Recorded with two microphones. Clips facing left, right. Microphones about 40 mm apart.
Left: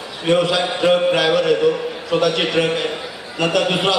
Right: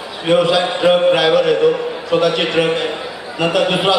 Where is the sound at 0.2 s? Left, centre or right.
Centre.